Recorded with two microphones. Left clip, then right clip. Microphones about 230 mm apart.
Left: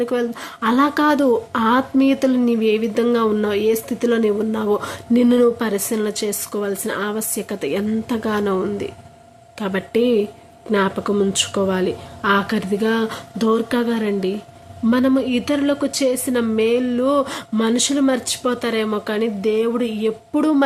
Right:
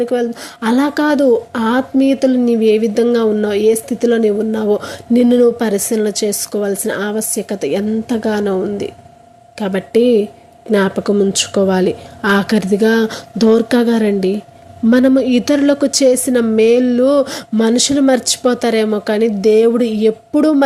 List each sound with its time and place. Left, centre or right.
0.0 s speech: centre